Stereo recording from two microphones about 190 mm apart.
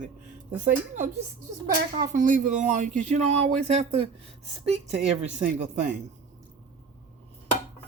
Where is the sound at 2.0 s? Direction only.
40° right (ahead or behind).